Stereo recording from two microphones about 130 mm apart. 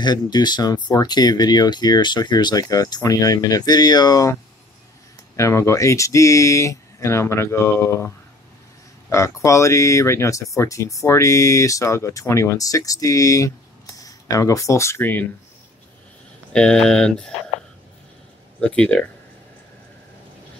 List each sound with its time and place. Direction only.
0.0 s speech: 35° left (ahead or behind)
9.1 s speech: 25° left (ahead or behind)
16.5 s speech: 5° left (ahead or behind)
18.6 s speech: 10° left (ahead or behind)